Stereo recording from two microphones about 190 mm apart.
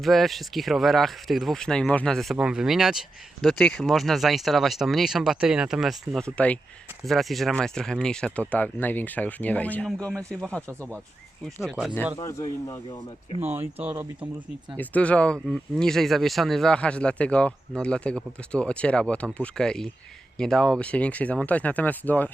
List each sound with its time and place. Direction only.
0.0 s speech: centre (ahead or behind)
11.6 s speech: centre (ahead or behind)
12.6 s speech: 20° left (ahead or behind)
13.4 s speech: 10° right (ahead or behind)
14.8 s speech: 5° left (ahead or behind)